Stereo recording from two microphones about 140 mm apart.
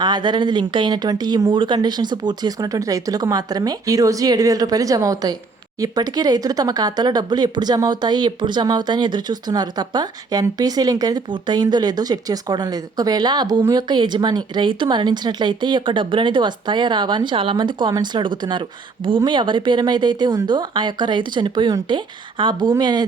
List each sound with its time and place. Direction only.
0.0 s speech: 30° right (ahead or behind)